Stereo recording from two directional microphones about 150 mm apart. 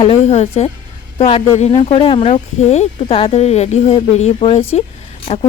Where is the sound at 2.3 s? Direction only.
50° left (ahead or behind).